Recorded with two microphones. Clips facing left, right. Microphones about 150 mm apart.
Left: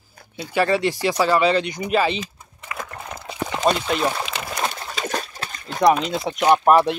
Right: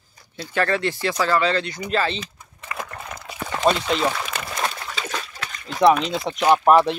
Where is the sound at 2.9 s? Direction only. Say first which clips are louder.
Left 1 dB; 20° left (ahead or behind).